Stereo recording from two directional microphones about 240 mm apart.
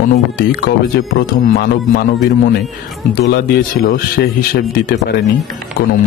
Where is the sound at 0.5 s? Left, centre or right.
Left.